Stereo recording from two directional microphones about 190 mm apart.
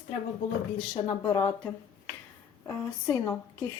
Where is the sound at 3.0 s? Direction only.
15° left (ahead or behind).